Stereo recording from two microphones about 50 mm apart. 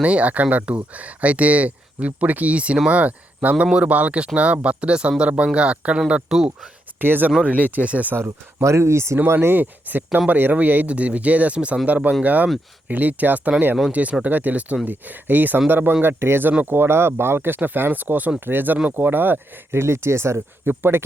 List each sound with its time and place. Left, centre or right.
0.0 s speech: right
6.2 s speech: centre
7.0 s speech: right
7.4 s speech: right
8.1 s speech: right
8.6 s speech: right
9.6 s speech: right
19.7 s speech: right
20.7 s speech: right